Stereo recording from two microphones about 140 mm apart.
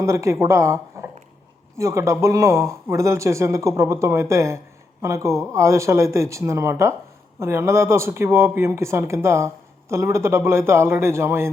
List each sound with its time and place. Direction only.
0.0 s speech: 20° right (ahead or behind)